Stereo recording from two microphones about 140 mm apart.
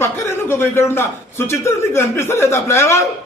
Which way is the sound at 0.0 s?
15° left (ahead or behind).